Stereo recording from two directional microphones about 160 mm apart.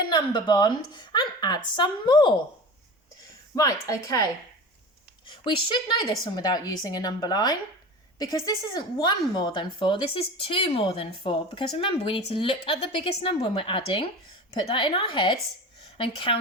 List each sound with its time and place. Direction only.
0.0 s a woman's voice: 25° left (ahead or behind)
3.5 s a woman's voice: 20° left (ahead or behind)
5.2 s a woman's voice: 30° left (ahead or behind)